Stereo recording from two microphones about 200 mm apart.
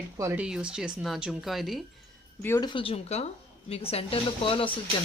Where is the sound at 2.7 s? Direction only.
25° left (ahead or behind).